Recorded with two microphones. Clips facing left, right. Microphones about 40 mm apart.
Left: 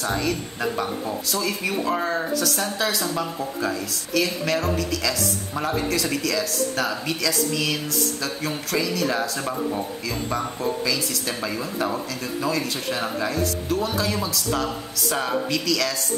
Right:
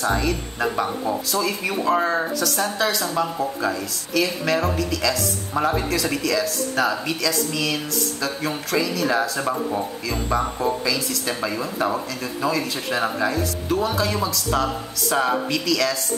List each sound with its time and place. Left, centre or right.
0.0 s speech: centre